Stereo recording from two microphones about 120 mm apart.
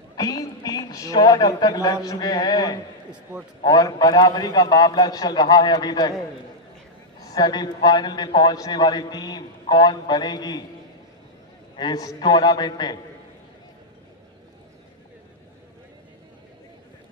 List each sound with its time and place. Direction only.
0.1 s a man's voice: 30° left (ahead or behind)
7.3 s a man's voice: 35° left (ahead or behind)
11.7 s a man's voice: 35° left (ahead or behind)